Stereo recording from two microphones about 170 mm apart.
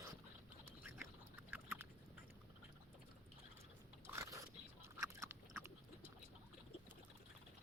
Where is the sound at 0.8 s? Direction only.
15° right (ahead or behind).